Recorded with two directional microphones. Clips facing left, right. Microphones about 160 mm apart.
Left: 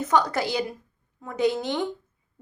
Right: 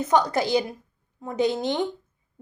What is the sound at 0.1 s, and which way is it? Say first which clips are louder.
A woman's voice: right 3 dB; 20° right (ahead or behind).